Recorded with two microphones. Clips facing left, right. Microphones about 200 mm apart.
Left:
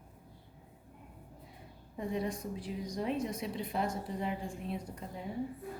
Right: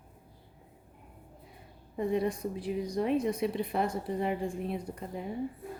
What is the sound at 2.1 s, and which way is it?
A woman's voice, 60° right (ahead or behind).